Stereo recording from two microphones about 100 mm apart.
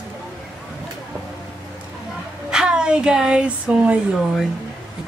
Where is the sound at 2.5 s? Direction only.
10° right (ahead or behind).